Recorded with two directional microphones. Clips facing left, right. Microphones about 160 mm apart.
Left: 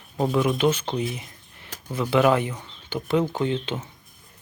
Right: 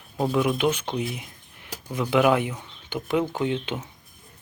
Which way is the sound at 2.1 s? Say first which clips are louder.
Left 1 dB; 10° right (ahead or behind).